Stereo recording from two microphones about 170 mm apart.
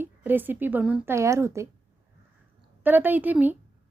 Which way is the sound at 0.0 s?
10° right (ahead or behind).